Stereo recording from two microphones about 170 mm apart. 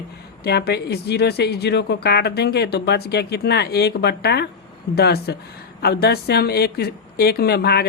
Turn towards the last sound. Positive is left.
turn(degrees=70)  # may be behind; listen again after turning